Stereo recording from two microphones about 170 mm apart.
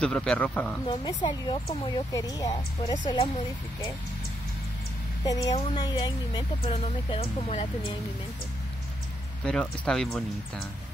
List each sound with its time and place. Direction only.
0.0 s speech: 5° left (ahead or behind)
0.8 s speech: 25° left (ahead or behind)
5.2 s speech: 20° left (ahead or behind)
9.4 s speech: 5° left (ahead or behind)